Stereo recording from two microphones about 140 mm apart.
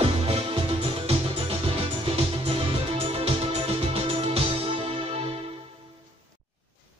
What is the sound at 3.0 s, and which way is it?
Music, 45° right (ahead or behind).